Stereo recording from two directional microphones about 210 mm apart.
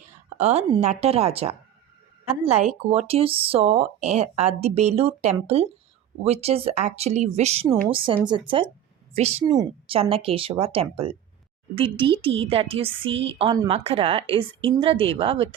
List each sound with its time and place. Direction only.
0.3 s a woman's voice: 35° right (ahead or behind)